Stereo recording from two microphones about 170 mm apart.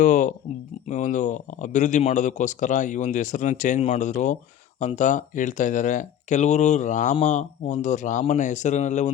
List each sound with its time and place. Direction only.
0.0 s speech: 50° left (ahead or behind)